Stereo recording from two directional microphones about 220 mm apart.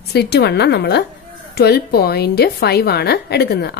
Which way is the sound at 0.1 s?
50° left (ahead or behind).